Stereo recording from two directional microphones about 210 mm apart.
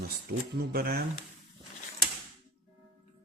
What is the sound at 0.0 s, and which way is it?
Speech, 50° right (ahead or behind).